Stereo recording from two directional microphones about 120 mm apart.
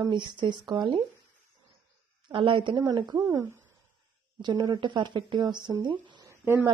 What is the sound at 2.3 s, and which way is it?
A woman's voice, 45° right (ahead or behind).